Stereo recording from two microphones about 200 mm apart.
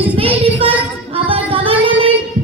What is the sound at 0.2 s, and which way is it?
Child singing, 25° right (ahead or behind).